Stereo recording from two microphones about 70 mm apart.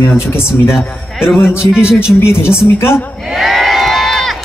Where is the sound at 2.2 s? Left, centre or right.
Left.